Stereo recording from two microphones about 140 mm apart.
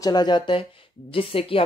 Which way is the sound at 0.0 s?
30° left (ahead or behind).